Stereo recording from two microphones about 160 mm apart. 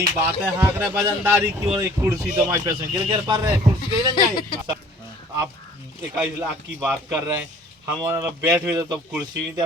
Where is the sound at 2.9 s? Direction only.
35° right (ahead or behind).